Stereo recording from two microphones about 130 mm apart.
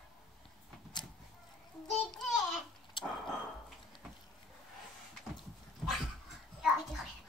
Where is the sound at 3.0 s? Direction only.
40° left (ahead or behind).